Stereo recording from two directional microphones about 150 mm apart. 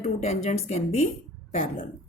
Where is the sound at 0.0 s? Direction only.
45° left (ahead or behind).